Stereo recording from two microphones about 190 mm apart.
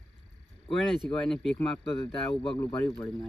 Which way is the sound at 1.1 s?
Centre (ahead or behind).